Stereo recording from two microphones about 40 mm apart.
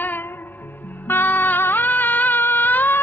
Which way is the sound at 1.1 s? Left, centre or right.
Left.